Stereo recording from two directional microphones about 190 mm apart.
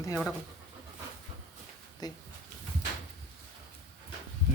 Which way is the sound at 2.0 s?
20° left (ahead or behind).